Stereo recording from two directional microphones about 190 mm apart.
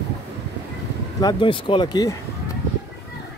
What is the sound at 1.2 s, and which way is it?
Speech, 25° left (ahead or behind).